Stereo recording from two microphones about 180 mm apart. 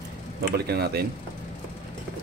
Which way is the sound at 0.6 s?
65° right (ahead or behind).